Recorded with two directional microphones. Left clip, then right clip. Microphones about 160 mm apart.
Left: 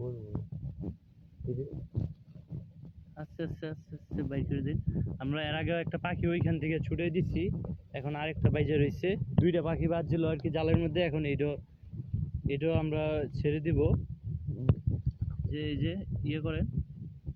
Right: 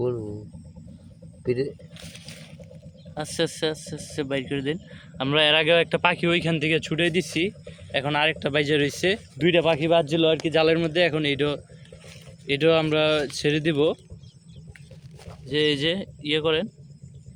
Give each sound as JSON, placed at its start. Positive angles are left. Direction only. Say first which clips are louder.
{"t": 3.2, "sound": "speech", "louder": "right 15 dB", "side_deg": -25}
{"t": 15.4, "sound": "speech", "louder": "right 15 dB", "side_deg": -35}